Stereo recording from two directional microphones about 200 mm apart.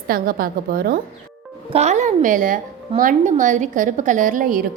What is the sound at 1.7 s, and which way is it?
A woman's voice, 35° right (ahead or behind).